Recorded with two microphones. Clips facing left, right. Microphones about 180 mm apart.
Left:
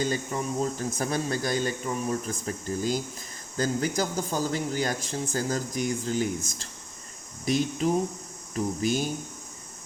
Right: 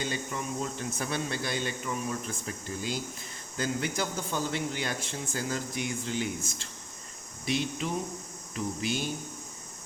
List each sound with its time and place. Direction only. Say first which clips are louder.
0.0 s speech: left 5 dB; 40° left (ahead or behind)
7.4 s speech: left 6 dB; 40° left (ahead or behind)